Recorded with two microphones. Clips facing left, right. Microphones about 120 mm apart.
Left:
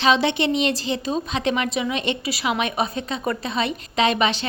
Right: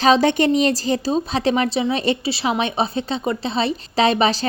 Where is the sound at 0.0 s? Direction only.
40° right (ahead or behind).